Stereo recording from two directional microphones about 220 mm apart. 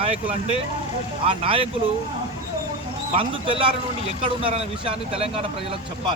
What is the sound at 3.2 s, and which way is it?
A man's voice, 25° right (ahead or behind).